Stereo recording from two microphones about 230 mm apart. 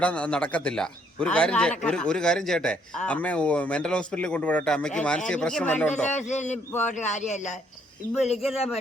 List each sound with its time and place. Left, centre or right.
0.0 s a man's voice: centre
6.1 s speech: left
8.3 s a man's voice: centre
8.5 s speech: left